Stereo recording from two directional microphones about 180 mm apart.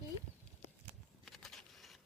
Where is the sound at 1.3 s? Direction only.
Centre (ahead or behind).